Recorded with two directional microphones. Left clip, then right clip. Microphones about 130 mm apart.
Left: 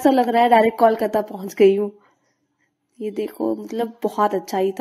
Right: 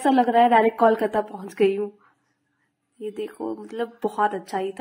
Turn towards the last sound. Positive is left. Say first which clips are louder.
# left 5 dB
turn(degrees=30)  # may be behind; listen again after turning